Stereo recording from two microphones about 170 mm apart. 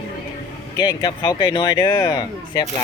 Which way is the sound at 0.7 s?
25° left (ahead or behind).